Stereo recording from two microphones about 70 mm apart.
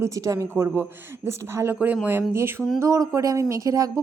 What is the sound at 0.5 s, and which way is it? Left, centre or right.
A man's voice, right.